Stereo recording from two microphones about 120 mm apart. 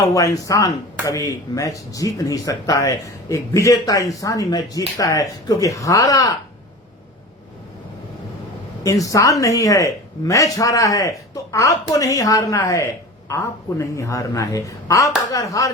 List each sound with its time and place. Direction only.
0.0 s speech: 25° left (ahead or behind)
8.8 s speech: 30° left (ahead or behind)